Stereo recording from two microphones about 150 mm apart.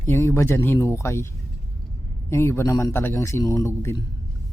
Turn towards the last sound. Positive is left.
turn(degrees=20)  # may be behind; listen again after turning